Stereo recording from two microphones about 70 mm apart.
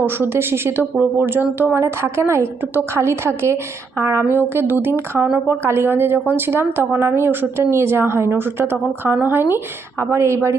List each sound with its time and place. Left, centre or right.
0.0 s speech: right